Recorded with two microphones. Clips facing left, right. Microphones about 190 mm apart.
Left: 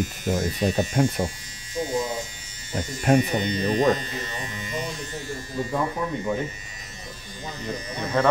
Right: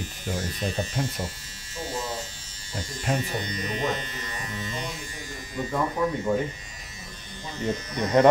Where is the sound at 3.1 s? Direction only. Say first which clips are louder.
Left 9 dB; 20° left (ahead or behind); by 4.4 s 35° left (ahead or behind).